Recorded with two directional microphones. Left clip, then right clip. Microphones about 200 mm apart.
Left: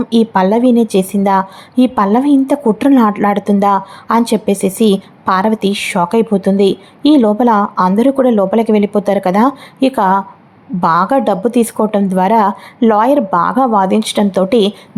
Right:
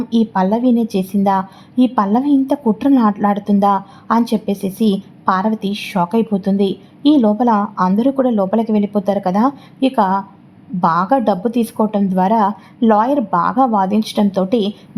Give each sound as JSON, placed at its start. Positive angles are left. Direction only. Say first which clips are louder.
{"t": 0.1, "sound": "a woman's voice", "louder": "left 5 dB", "side_deg": 20}